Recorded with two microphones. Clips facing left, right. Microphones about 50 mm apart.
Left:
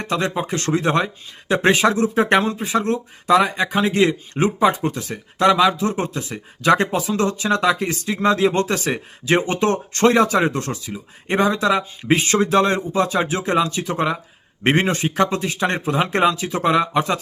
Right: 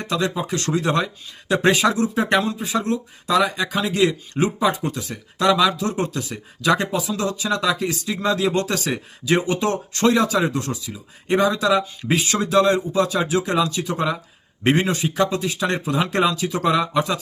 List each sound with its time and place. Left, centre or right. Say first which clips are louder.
0.0 s speech: left 1 dB; left